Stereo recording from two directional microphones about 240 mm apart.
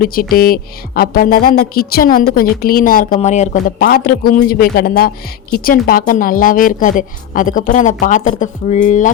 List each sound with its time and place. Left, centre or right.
0.0 s a woman's voice: left